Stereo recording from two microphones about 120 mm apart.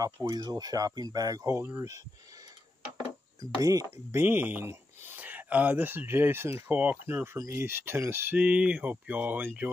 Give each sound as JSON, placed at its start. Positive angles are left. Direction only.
{"t": 0.0, "sound": "speech", "side_deg": -35}
{"t": 3.3, "sound": "speech", "side_deg": -30}